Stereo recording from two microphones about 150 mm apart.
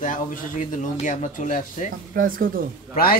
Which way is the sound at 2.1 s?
65° right (ahead or behind).